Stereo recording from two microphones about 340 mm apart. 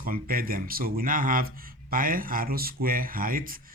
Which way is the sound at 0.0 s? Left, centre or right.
Right.